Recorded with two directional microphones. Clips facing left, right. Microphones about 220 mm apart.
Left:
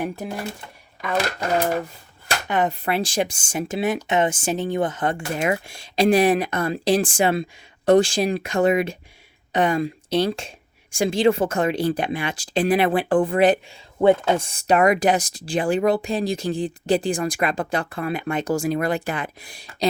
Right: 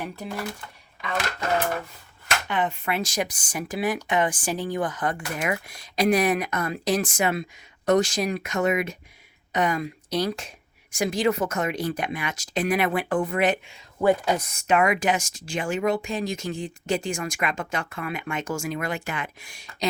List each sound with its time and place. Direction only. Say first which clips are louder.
2.2 s speech: left 4 dB; 40° left (ahead or behind)